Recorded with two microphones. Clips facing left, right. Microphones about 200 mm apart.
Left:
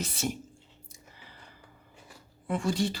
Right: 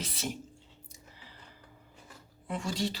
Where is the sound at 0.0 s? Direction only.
50° left (ahead or behind).